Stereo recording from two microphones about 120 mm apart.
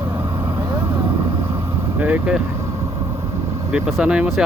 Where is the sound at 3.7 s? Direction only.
10° right (ahead or behind).